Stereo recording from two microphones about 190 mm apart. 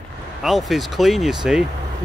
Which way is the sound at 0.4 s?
Centre (ahead or behind).